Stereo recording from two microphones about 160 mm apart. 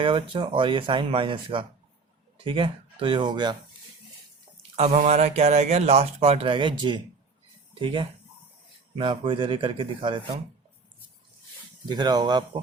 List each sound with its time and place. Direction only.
0.0 s speech: 30° right (ahead or behind)
4.8 s speech: 45° right (ahead or behind)
11.9 s speech: 25° right (ahead or behind)